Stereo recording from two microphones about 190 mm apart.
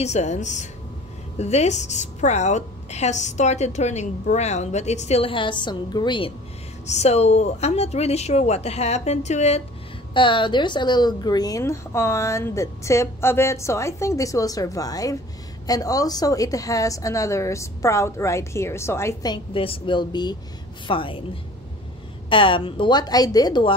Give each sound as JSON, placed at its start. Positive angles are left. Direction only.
{"t": 0.0, "sound": "a woman's voice", "side_deg": 35}
{"t": 10.1, "sound": "a woman's voice", "side_deg": 25}
{"t": 22.3, "sound": "a woman's voice", "side_deg": 25}